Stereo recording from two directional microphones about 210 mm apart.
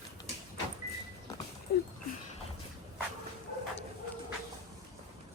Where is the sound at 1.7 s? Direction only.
50° left (ahead or behind).